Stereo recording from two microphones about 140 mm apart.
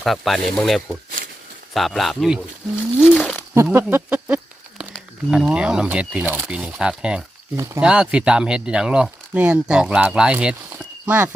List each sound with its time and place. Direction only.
0.0 s speech: centre (ahead or behind)
3.5 s speech: 15° right (ahead or behind)
7.5 s speech: 20° right (ahead or behind)
7.8 s speech: 5° right (ahead or behind)
10.7 s a sound: 10° right (ahead or behind)